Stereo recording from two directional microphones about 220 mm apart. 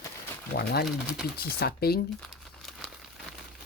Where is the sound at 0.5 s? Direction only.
45° left (ahead or behind).